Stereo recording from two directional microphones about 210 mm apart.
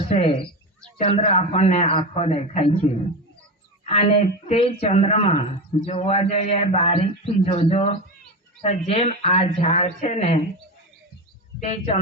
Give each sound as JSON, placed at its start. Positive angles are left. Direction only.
{"t": 0.1, "sound": "a man's voice", "side_deg": 25}
{"t": 11.6, "sound": "a man's voice", "side_deg": 25}